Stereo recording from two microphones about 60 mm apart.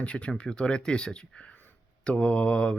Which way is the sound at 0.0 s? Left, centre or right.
Centre.